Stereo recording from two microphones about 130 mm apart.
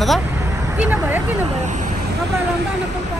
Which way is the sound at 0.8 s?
15° right (ahead or behind).